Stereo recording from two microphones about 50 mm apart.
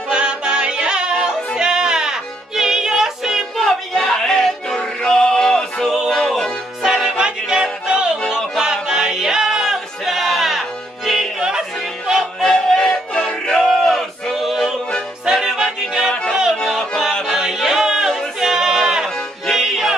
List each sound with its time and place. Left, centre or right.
0.1 s music: centre
3.5 s music: centre
6.9 s music: centre
12.4 s music: centre
13.7 s a sound: centre
15.2 s music: centre
16.1 s music: centre
17.3 s a sound: centre
19.0 s music: centre
19.6 s music: centre